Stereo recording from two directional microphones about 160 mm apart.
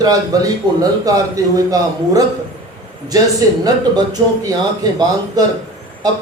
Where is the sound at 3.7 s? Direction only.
25° right (ahead or behind).